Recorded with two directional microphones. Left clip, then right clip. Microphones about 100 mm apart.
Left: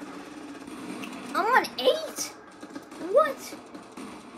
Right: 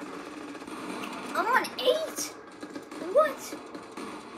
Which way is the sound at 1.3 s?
90° left.